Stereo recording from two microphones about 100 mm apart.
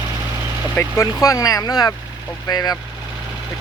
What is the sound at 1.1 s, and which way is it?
Speech, 35° left (ahead or behind).